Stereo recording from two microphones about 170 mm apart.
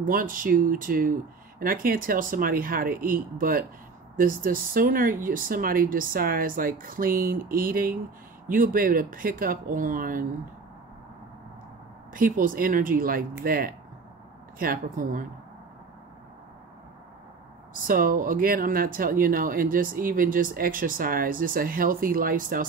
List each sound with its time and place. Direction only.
0.0 s speech: 55° right (ahead or behind)
12.1 s speech: 55° right (ahead or behind)
17.8 s speech: 55° right (ahead or behind)